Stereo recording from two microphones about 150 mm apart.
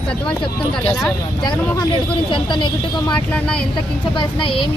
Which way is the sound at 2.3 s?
30° left (ahead or behind).